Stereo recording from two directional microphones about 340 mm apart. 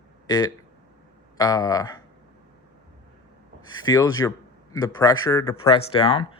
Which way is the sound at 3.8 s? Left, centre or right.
Centre.